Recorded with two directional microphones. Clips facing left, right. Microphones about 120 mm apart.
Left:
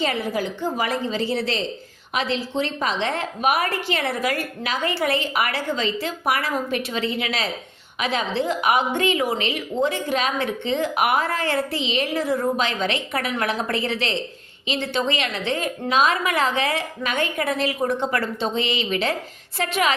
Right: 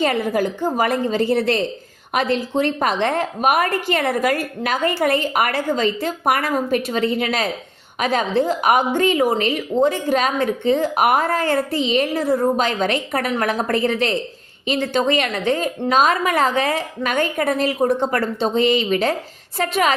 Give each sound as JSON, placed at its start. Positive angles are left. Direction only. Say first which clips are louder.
{"t": 0.0, "sound": "a woman's voice", "louder": "right 5 dB", "side_deg": -50}